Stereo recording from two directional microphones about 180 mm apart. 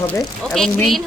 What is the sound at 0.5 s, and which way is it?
Speech, centre (ahead or behind).